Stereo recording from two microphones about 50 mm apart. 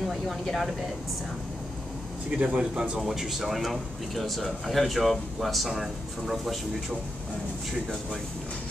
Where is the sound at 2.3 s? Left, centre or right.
Right.